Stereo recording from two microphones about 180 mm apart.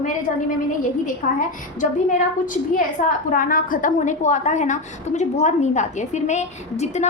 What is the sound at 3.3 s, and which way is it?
A woman's voice, 50° left (ahead or behind).